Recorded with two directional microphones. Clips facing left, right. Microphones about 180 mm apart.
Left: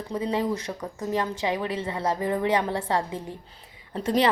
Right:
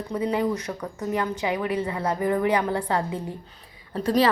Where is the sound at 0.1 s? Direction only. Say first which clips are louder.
Right 2 dB; 25° left (ahead or behind).